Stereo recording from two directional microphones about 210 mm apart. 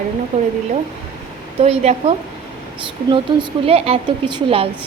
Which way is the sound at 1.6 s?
30° right (ahead or behind).